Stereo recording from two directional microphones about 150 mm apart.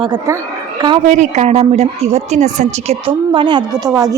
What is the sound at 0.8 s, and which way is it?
Speech, 30° right (ahead or behind).